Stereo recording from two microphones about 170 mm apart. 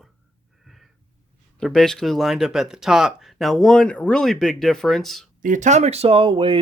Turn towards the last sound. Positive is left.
turn(degrees=-30)  # may be behind; listen again after turning